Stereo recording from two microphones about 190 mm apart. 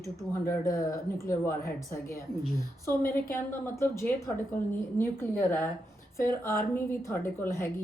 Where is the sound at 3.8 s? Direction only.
15° left (ahead or behind).